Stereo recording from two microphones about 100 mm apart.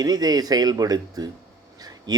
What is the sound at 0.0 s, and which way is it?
A man's voice, 40° right (ahead or behind).